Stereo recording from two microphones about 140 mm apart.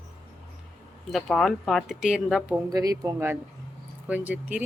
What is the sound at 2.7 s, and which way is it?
Speech, 25° right (ahead or behind).